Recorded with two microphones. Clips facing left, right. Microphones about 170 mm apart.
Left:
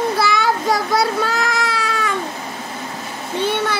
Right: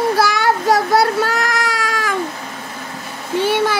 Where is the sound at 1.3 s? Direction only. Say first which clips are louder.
Right 1 dB; 75° right (ahead or behind).